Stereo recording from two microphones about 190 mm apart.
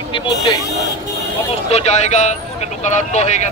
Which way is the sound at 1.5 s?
35° left (ahead or behind).